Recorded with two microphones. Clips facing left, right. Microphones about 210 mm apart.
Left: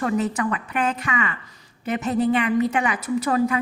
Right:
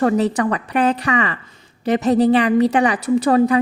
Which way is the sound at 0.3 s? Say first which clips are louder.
Right 6 dB; 35° right (ahead or behind).